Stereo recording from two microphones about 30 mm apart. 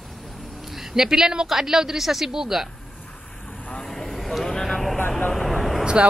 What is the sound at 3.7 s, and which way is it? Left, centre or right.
Vehicle, centre.